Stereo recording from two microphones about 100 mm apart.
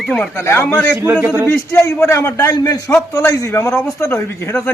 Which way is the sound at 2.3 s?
40° left (ahead or behind).